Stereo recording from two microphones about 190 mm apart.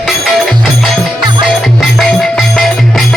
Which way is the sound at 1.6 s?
Centre (ahead or behind).